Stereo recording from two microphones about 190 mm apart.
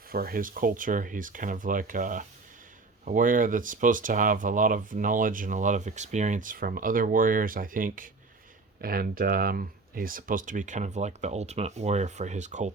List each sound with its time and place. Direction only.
0.1 s speech: 50° right (ahead or behind)